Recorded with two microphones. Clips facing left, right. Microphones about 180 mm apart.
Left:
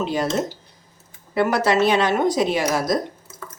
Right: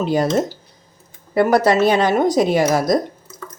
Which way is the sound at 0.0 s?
40° right (ahead or behind).